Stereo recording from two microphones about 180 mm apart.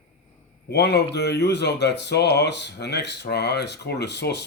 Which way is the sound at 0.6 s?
70° left (ahead or behind).